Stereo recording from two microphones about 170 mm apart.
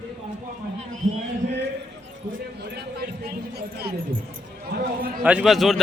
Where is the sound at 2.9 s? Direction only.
65° right (ahead or behind).